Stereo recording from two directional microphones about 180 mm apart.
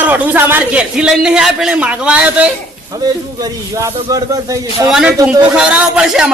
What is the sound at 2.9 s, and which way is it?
Speech, 20° right (ahead or behind).